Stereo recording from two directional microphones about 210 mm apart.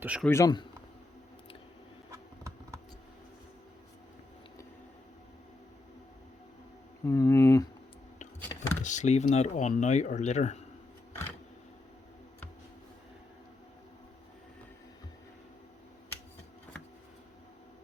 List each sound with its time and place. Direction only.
0.0 s speech: 5° right (ahead or behind)
0.3 s speech: 15° left (ahead or behind)
2.0 s patter: 15° right (ahead or behind)
7.0 s a sound: 15° left (ahead or behind)
8.8 s speech: 35° left (ahead or behind)